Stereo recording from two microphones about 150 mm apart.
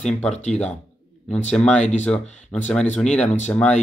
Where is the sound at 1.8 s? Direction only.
50° left (ahead or behind).